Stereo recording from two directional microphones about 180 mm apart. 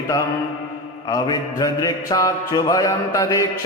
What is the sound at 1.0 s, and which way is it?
Mantra, 20° left (ahead or behind).